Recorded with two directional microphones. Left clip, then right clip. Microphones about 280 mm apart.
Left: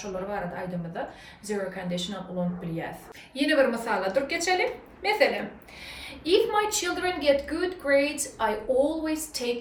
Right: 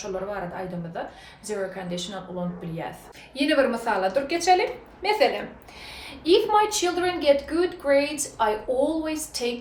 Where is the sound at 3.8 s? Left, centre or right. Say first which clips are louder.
Right 2 dB; centre.